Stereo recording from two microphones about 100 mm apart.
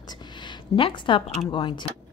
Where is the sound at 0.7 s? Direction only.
60° left (ahead or behind).